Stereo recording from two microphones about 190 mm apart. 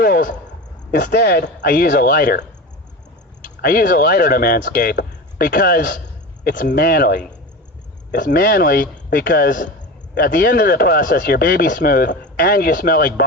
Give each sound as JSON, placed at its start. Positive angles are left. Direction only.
{"t": 0.0, "sound": "a man's voice", "side_deg": 50}
{"t": 3.6, "sound": "speech", "side_deg": 50}